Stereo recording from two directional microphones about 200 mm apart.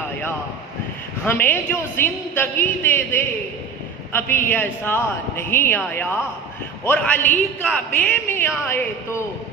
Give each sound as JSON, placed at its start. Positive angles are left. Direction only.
{"t": 1.2, "sound": "a man's voice", "side_deg": 10}
{"t": 4.1, "sound": "a man's voice", "side_deg": 10}